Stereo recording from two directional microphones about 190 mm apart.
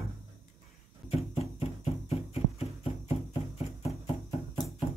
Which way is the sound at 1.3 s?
30° left (ahead or behind).